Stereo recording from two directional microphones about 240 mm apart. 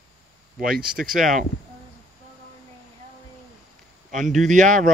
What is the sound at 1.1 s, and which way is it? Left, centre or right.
Speech, centre.